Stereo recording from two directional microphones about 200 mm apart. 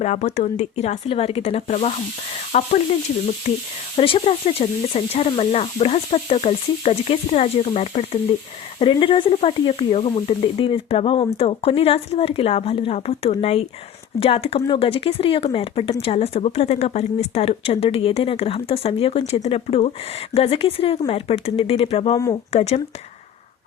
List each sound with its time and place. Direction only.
0.0 s speech: 35° left (ahead or behind)
3.9 s speech: 30° left (ahead or behind)